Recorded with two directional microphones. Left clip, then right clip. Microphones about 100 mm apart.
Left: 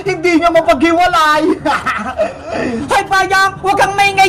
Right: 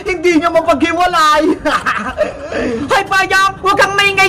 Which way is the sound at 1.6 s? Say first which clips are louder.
Right 1 dB; 35° right (ahead or behind).